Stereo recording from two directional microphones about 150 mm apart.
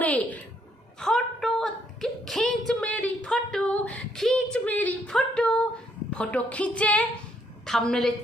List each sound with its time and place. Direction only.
0.0 s a woman's voice: 10° left (ahead or behind)
0.9 s a sound: 5° left (ahead or behind)
6.1 s a woman's voice: 10° left (ahead or behind)